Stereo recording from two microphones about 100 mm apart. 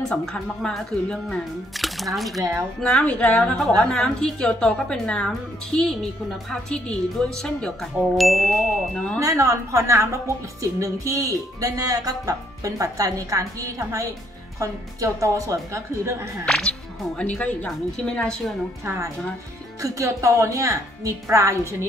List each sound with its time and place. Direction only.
0.1 s a woman's voice: 5° left (ahead or behind)
9.2 s a woman's voice: 35° right (ahead or behind)
16.4 s a woman's voice: 5° left (ahead or behind)
19.8 s a woman's voice: 30° right (ahead or behind)